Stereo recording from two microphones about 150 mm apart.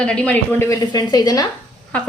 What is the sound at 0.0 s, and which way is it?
A woman's voice, 5° left (ahead or behind).